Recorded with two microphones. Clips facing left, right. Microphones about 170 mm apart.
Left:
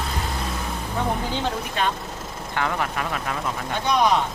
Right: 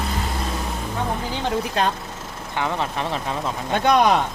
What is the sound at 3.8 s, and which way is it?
Speech, 55° right (ahead or behind).